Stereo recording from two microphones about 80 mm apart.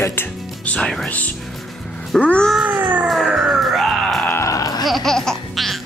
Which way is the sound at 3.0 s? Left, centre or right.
Centre.